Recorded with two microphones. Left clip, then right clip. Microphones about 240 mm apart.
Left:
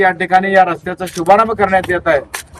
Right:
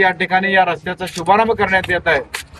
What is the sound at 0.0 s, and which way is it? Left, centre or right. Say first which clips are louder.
Speech: left 3 dB; centre.